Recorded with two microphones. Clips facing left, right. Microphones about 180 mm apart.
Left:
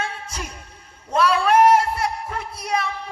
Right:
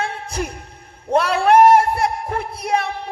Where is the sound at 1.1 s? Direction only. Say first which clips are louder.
Right 3 dB; 60° right (ahead or behind).